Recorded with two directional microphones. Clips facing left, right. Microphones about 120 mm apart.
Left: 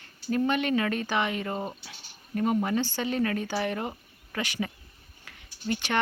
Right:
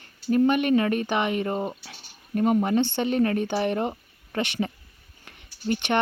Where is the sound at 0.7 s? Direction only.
25° right (ahead or behind).